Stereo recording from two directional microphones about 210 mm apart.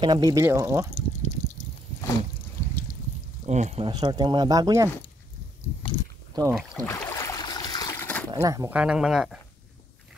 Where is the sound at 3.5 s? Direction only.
35° right (ahead or behind); by 4.9 s 15° right (ahead or behind).